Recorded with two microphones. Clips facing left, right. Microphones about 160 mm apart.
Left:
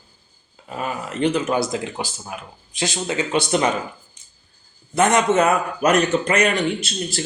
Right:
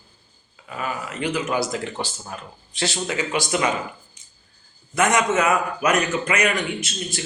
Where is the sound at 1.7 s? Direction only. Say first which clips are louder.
Left 2 dB; 15° left (ahead or behind).